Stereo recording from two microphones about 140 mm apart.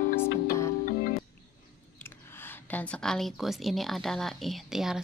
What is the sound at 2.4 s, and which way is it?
Speech, 10° left (ahead or behind).